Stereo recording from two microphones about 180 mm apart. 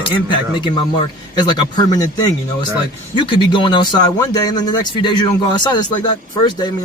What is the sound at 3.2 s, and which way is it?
A man's voice, 25° left (ahead or behind).